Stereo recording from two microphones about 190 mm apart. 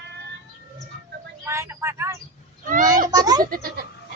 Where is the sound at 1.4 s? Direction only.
15° right (ahead or behind).